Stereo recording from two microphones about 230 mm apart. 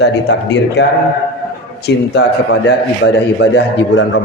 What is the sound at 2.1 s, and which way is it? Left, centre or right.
A man's voice, left.